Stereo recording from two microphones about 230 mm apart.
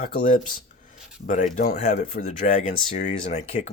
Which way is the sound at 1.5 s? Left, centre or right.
Left.